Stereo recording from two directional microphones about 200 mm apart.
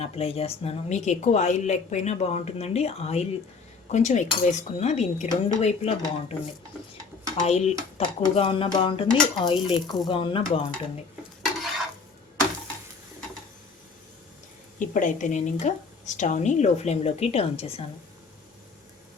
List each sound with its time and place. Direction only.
0.0 s a woman's voice: 30° left (ahead or behind)
7.9 s dishes: 25° left (ahead or behind)
14.8 s a woman's voice: 40° left (ahead or behind)